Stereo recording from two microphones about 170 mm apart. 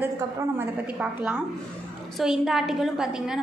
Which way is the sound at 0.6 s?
10° right (ahead or behind).